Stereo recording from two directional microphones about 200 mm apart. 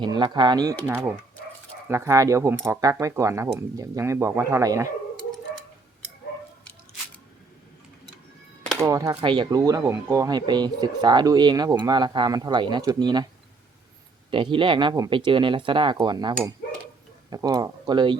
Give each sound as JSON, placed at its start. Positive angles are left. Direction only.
{"t": 0.0, "sound": "speech", "side_deg": -20}
{"t": 8.8, "sound": "speech", "side_deg": -15}
{"t": 14.3, "sound": "speech", "side_deg": -25}